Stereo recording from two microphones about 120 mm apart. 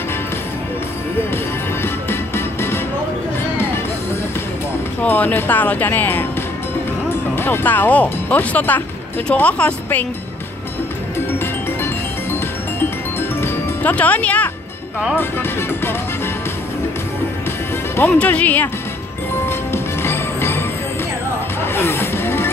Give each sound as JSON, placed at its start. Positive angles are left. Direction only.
{"t": 1.3, "sound": "music", "side_deg": 20}
{"t": 5.0, "sound": "speech", "side_deg": 15}
{"t": 7.3, "sound": "speech", "side_deg": 20}
{"t": 11.3, "sound": "music", "side_deg": 20}
{"t": 15.1, "sound": "speech", "side_deg": 20}
{"t": 17.9, "sound": "speech", "side_deg": 15}
{"t": 19.4, "sound": "music", "side_deg": 20}
{"t": 21.7, "sound": "vehicle", "side_deg": 20}